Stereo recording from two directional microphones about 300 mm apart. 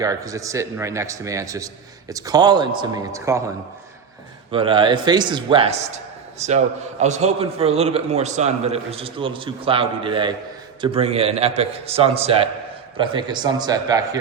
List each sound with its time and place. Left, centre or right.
0.0 s a man's voice: centre
4.5 s a man's voice: centre